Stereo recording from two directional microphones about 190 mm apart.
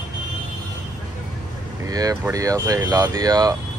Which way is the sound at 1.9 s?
20° right (ahead or behind).